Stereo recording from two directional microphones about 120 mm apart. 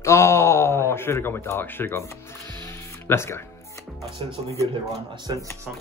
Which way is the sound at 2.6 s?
20° left (ahead or behind).